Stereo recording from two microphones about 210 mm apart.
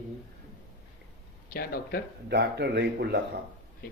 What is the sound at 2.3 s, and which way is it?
Speech, 50° right (ahead or behind).